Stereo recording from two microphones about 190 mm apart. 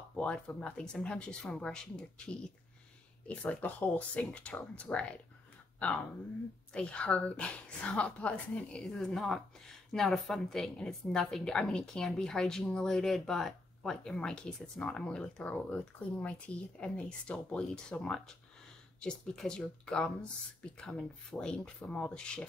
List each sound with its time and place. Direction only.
0.1 s a woman's voice: 5° left (ahead or behind)
6.7 s a woman's voice: 5° left (ahead or behind)